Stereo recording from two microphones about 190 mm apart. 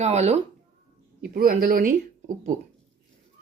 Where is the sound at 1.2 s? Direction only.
50° right (ahead or behind).